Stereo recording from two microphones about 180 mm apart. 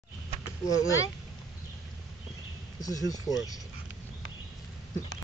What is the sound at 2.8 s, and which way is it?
Speech, 20° left (ahead or behind).